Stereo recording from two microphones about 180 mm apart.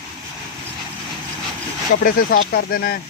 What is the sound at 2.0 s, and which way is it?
Speech, 55° left (ahead or behind).